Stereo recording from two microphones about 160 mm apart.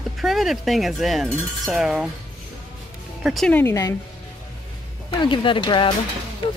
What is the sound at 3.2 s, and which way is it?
Speech, centre (ahead or behind).